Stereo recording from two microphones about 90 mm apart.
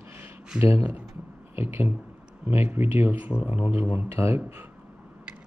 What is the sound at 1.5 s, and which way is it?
Speech, 20° right (ahead or behind).